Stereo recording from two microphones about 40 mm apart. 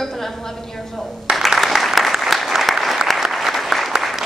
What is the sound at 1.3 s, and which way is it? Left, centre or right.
Applause, right.